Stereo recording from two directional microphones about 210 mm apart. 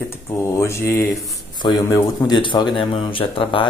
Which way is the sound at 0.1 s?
10° left (ahead or behind).